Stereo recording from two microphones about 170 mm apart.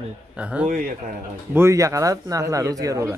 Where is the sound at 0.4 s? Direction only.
5° right (ahead or behind).